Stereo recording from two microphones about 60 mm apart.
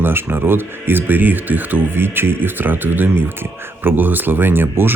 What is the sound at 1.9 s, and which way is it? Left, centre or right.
Speech, right.